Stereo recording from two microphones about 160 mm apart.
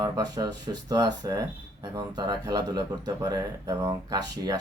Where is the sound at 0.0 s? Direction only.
25° right (ahead or behind).